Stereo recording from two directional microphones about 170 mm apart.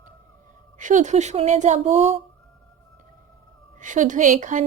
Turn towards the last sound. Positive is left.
turn(degrees=-50)  # may be behind; listen again after turning